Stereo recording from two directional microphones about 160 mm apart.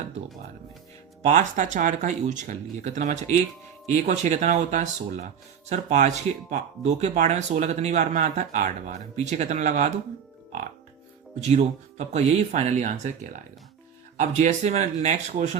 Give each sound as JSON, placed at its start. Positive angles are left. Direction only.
{"t": 1.3, "sound": "speech", "side_deg": -50}
{"t": 11.3, "sound": "speech", "side_deg": -45}